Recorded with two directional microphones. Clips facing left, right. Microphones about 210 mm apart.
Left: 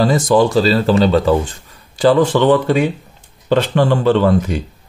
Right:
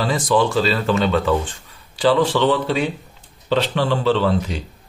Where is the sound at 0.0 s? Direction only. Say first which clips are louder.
Left 6 dB; 40° left (ahead or behind).